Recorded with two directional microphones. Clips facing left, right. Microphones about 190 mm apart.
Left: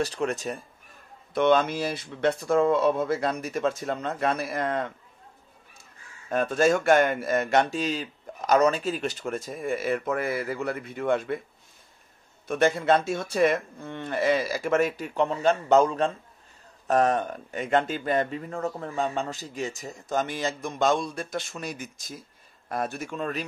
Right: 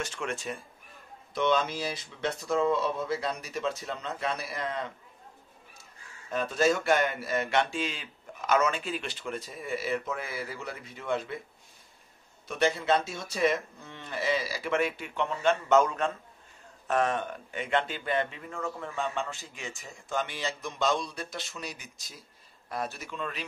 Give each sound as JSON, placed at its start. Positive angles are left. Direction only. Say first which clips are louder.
{"t": 0.0, "sound": "speech", "louder": "left 7 dB", "side_deg": 35}
{"t": 1.3, "sound": "speech", "louder": "left 6 dB", "side_deg": 55}
{"t": 6.3, "sound": "speech", "louder": "left 4 dB", "side_deg": 50}
{"t": 12.4, "sound": "speech", "louder": "left 5 dB", "side_deg": 50}